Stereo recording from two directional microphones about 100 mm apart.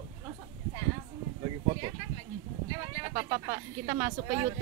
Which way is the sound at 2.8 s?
35° right (ahead or behind).